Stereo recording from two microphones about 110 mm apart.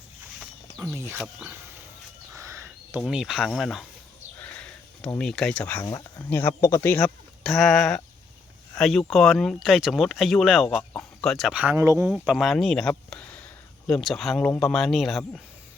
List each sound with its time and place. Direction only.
0.8 s speech: 25° right (ahead or behind)
2.3 s a sound: 25° right (ahead or behind)
3.1 s speech: 5° right (ahead or behind)
4.4 s a sound: 10° left (ahead or behind)
5.8 s speech: 35° left (ahead or behind)
7.4 s speech: centre (ahead or behind)
11.5 s speech: 10° right (ahead or behind)
11.8 s speech: 25° right (ahead or behind)
12.0 s speech: 10° right (ahead or behind)
12.9 s a sound: 10° left (ahead or behind)
13.8 s speech: 5° left (ahead or behind)